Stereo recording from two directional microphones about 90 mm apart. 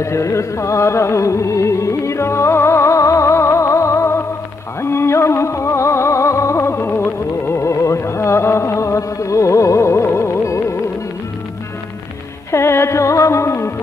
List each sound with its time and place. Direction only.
0.0 s music: 35° left (ahead or behind)
12.4 s music: 30° left (ahead or behind)